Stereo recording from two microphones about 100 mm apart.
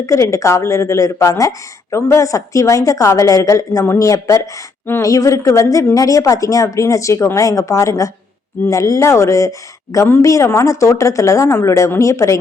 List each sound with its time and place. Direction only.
0.0 s speech: 30° left (ahead or behind)